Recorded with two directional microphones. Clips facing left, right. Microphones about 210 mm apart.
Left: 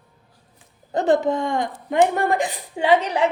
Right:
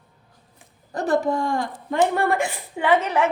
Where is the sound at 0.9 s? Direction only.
20° left (ahead or behind).